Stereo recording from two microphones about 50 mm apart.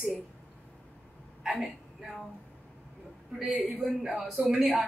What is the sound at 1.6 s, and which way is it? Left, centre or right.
Speech, centre.